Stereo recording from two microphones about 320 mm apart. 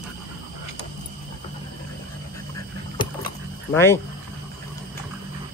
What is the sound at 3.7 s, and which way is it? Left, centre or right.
Speech, centre.